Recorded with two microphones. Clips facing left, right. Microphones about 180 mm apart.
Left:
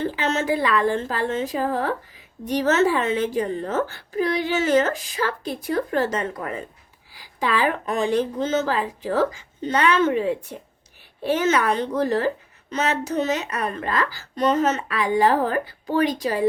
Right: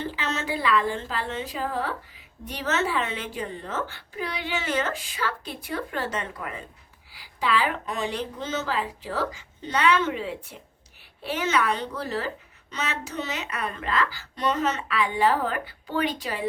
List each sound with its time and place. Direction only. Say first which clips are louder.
0.0 s a woman's voice: left 7 dB; 45° left (ahead or behind)